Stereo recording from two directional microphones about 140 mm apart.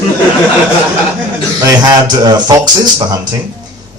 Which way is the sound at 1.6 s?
30° right (ahead or behind).